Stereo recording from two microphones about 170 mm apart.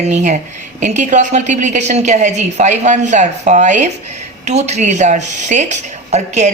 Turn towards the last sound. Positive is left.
turn(degrees=-40)  # may be behind; listen again after turning